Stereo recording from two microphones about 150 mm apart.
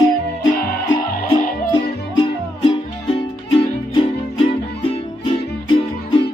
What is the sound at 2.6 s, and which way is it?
Music, 35° left (ahead or behind).